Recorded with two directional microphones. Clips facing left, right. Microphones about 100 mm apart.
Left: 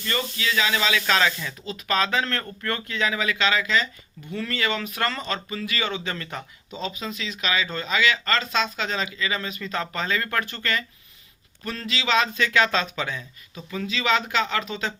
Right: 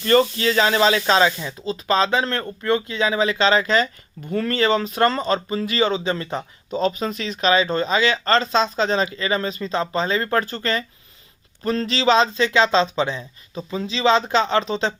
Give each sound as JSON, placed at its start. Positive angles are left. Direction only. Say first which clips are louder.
{"t": 0.0, "sound": "speech", "louder": "right 11 dB", "side_deg": -45}
{"t": 6.7, "sound": "speech", "louder": "right 10 dB", "side_deg": -45}